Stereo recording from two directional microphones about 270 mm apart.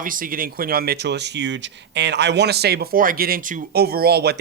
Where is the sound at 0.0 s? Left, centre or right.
Right.